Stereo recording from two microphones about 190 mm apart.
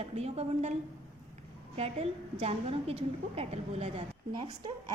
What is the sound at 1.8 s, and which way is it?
A woman's voice, 30° right (ahead or behind).